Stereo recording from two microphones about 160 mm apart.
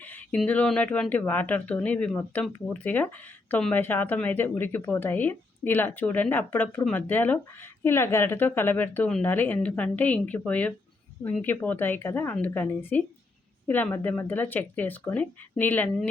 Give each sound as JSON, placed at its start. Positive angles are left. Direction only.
{"t": 0.0, "sound": "speech", "side_deg": 10}